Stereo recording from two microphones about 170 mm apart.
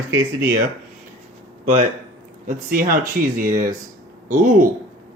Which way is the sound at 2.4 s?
55° right (ahead or behind).